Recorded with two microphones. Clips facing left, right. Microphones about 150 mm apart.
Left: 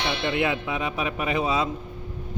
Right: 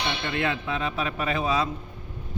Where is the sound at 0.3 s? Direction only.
15° left (ahead or behind).